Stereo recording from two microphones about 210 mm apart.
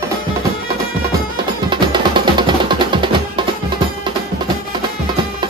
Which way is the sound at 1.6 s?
20° right (ahead or behind).